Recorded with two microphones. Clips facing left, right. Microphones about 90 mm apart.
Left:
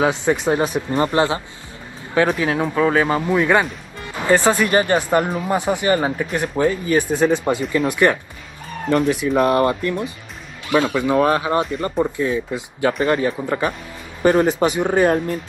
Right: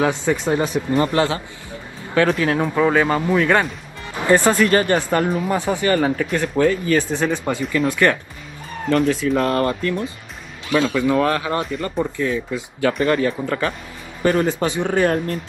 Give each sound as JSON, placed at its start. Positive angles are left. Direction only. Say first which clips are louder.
{"t": 0.0, "sound": "speech", "louder": "left 1 dB", "side_deg": 20}
{"t": 2.6, "sound": "speech", "louder": "left 1 dB", "side_deg": -5}
{"t": 2.9, "sound": "speech", "louder": "even", "side_deg": 5}